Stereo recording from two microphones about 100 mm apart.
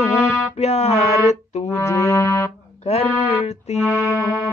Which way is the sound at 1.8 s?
30° left (ahead or behind).